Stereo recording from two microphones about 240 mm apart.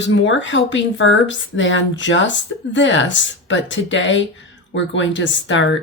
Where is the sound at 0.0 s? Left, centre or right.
Left.